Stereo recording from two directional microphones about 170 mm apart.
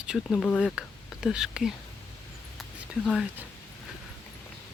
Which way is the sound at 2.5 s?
Centre (ahead or behind).